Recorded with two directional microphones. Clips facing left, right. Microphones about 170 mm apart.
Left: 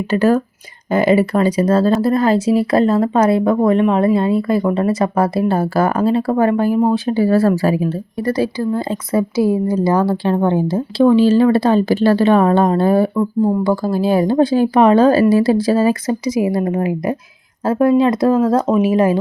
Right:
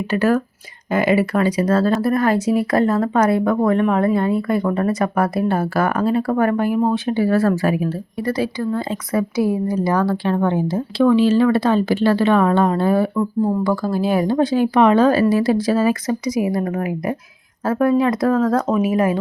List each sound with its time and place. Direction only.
0.1 s speech: 30° left (ahead or behind)
13.1 s speech: 20° left (ahead or behind)
13.8 s speech: 30° left (ahead or behind)